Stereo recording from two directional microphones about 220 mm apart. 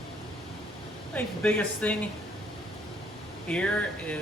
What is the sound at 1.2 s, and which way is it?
Speech, 5° left (ahead or behind).